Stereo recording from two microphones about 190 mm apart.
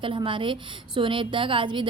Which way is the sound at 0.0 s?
25° right (ahead or behind).